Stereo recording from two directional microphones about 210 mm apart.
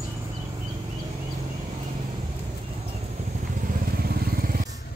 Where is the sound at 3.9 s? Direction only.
45° right (ahead or behind).